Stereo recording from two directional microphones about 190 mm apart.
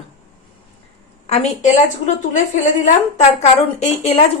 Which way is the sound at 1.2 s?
35° left (ahead or behind).